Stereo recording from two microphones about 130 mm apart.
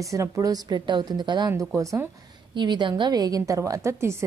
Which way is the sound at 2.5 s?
35° right (ahead or behind).